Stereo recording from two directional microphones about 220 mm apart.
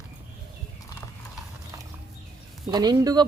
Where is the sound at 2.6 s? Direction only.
20° right (ahead or behind).